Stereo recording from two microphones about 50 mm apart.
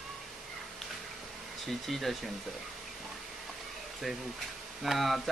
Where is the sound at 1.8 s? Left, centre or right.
Centre.